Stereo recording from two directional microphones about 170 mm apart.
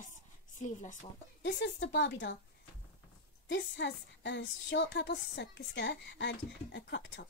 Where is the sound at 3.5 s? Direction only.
90° left.